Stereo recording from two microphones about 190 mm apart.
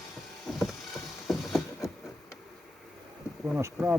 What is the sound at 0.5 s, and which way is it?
Vehicle, centre (ahead or behind).